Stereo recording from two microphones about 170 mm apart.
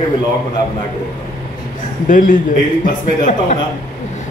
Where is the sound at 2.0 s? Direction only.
50° left (ahead or behind).